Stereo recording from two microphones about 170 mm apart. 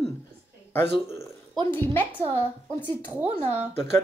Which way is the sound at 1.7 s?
10° left (ahead or behind).